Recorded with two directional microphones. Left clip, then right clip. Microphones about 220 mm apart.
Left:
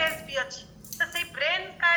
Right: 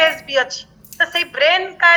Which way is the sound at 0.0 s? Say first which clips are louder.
Right 12 dB; 45° right (ahead or behind).